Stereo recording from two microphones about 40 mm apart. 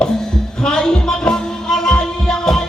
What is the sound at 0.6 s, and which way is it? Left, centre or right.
Music, centre.